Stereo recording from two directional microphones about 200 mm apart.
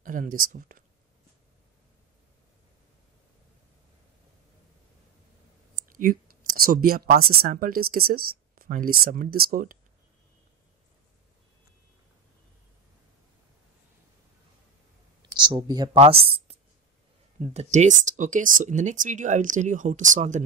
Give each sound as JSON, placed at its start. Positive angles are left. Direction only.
{"t": 0.0, "sound": "speech", "side_deg": -40}
{"t": 5.9, "sound": "a sound", "side_deg": -45}
{"t": 7.4, "sound": "speech", "side_deg": -45}
{"t": 15.2, "sound": "speech", "side_deg": -20}
{"t": 17.6, "sound": "speech", "side_deg": -35}